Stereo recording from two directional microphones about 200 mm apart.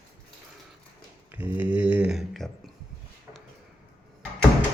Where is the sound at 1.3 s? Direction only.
10° right (ahead or behind).